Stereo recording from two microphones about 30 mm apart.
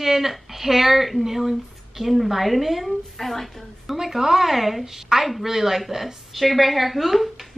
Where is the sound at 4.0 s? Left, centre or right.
Centre.